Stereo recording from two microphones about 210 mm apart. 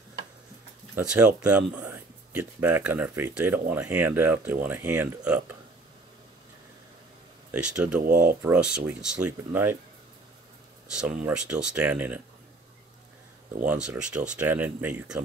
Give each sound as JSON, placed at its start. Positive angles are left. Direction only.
{"t": 0.9, "sound": "speech", "side_deg": -5}
{"t": 7.5, "sound": "speech", "side_deg": -5}
{"t": 8.0, "sound": "speech", "side_deg": -40}
{"t": 8.4, "sound": "speech", "side_deg": -5}
{"t": 11.2, "sound": "speech", "side_deg": -5}
{"t": 13.8, "sound": "speech", "side_deg": -5}